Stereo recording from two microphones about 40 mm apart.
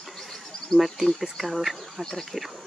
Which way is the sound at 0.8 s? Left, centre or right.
Centre.